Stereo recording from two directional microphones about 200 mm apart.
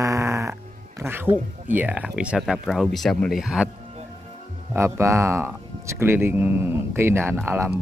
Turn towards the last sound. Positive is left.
turn(degrees=-10)  # may be behind; listen again after turning